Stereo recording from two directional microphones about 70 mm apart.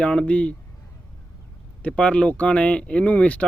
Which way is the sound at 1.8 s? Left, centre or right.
Centre.